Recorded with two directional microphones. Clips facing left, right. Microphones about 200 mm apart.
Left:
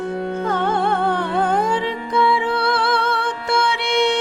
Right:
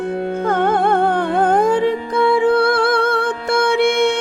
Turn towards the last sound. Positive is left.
turn(degrees=-50)  # may be behind; listen again after turning